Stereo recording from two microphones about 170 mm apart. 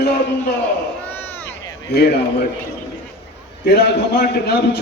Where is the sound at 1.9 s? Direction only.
75° left (ahead or behind).